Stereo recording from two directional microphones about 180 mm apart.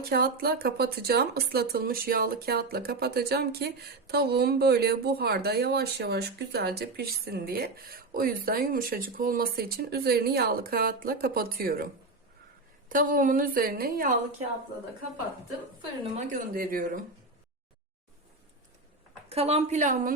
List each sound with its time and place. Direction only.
0.0 s speech: 60° right (ahead or behind)
12.9 s a woman's voice: 50° right (ahead or behind)
16.1 s a woman's voice: 45° right (ahead or behind)
19.3 s a woman's voice: 35° right (ahead or behind)